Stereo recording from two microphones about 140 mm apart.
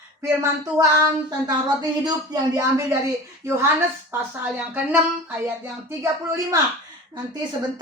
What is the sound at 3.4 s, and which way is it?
Music, 20° right (ahead or behind).